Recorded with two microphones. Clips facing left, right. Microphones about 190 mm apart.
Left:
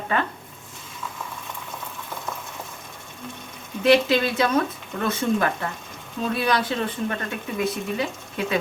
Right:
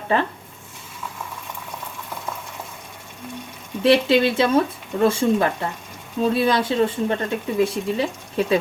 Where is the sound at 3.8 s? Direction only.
25° right (ahead or behind).